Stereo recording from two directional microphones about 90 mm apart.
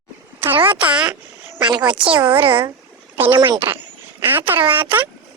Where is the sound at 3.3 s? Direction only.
65° right (ahead or behind).